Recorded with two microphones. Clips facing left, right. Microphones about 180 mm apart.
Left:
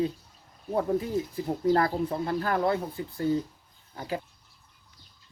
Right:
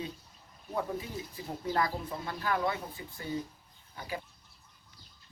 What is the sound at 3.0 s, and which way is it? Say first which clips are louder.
Speech: left 13 dB; 55° left (ahead or behind).